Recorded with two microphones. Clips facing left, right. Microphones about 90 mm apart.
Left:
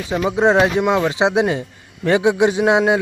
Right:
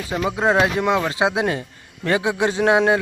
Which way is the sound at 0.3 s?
25° left (ahead or behind).